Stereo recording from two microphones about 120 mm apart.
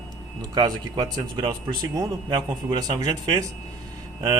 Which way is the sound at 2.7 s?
35° right (ahead or behind).